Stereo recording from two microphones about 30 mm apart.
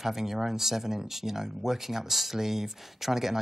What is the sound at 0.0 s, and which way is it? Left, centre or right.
Speech, centre.